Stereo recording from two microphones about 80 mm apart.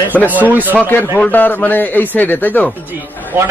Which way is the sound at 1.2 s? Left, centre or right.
Left.